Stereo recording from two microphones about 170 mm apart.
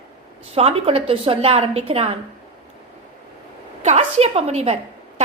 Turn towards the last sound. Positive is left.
turn(degrees=-40)  # may be behind; listen again after turning